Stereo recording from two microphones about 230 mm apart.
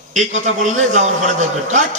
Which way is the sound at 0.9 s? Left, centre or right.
Right.